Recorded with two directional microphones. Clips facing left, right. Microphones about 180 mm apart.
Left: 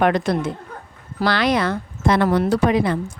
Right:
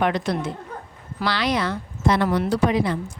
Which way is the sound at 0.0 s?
50° left (ahead or behind).